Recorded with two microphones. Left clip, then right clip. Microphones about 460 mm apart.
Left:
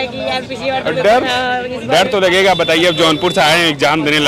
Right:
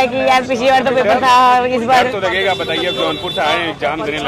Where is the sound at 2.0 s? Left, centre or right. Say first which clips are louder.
Left 3 dB; left.